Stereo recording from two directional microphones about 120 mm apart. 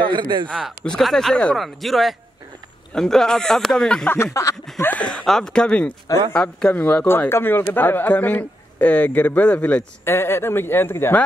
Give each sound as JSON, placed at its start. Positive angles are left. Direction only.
{"t": 0.0, "sound": "speech", "side_deg": -40}
{"t": 0.5, "sound": "speech", "side_deg": 5}
{"t": 4.1, "sound": "speech", "side_deg": 25}
{"t": 4.9, "sound": "a man's voice", "side_deg": 5}